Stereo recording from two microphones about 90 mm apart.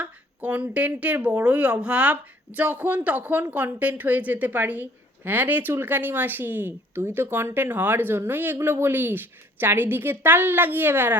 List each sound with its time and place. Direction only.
0.0 s a woman's voice: 15° right (ahead or behind)